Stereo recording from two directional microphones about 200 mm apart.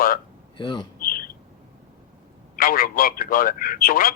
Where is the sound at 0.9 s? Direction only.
45° left (ahead or behind).